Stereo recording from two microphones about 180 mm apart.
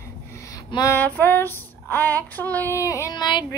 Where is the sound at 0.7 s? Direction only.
20° left (ahead or behind).